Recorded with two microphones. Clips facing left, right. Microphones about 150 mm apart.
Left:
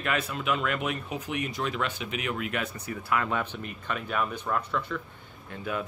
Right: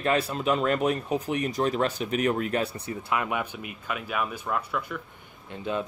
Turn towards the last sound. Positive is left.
turn(degrees=-25)  # may be behind; listen again after turning